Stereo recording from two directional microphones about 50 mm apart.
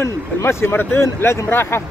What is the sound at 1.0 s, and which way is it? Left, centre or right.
Speech, left.